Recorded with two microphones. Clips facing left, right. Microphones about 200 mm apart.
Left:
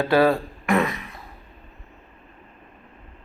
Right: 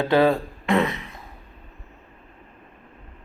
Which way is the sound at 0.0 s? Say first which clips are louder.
Even; 20° right (ahead or behind).